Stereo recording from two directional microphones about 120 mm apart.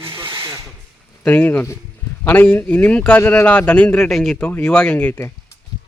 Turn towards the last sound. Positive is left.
turn(degrees=10)  # may be behind; listen again after turning